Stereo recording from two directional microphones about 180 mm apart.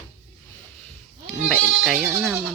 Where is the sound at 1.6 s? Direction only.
Centre (ahead or behind).